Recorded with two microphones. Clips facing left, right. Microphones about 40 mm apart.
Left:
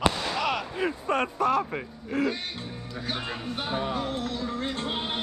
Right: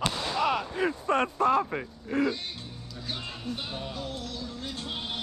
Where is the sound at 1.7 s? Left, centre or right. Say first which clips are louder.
Even; left.